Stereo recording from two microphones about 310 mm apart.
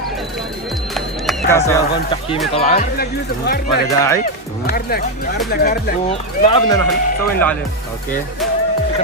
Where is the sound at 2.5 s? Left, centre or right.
Centre.